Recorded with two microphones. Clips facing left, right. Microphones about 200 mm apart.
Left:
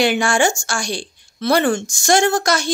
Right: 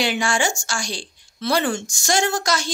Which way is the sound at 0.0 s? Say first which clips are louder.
Left 5 dB; 55° left (ahead or behind).